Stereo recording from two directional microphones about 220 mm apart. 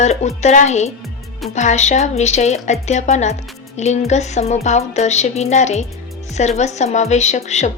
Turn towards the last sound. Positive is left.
turn(degrees=30)  # may be behind; listen again after turning